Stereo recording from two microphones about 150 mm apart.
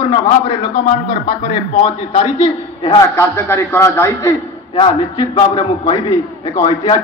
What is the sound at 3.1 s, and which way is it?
A man's voice, 15° left (ahead or behind).